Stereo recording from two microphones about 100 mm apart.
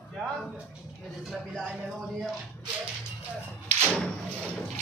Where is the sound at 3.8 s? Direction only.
10° left (ahead or behind).